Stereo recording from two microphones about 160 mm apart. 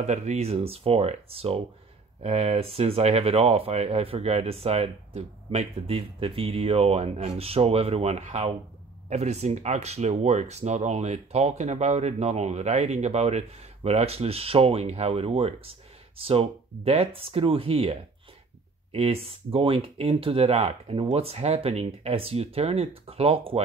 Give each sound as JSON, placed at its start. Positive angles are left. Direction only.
{"t": 0.0, "sound": "speech", "side_deg": -45}